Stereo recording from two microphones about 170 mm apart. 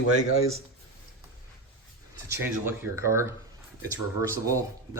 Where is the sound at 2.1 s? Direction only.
15° right (ahead or behind).